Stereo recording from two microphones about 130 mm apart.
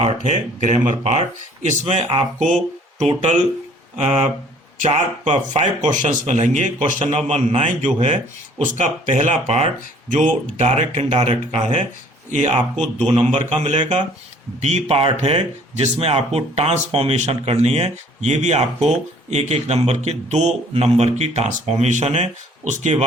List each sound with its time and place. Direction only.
0.2 s speech: 65° right (ahead or behind)
7.0 s speech: 50° right (ahead or behind)
12.7 s speech: 10° left (ahead or behind)
13.1 s speech: 55° right (ahead or behind)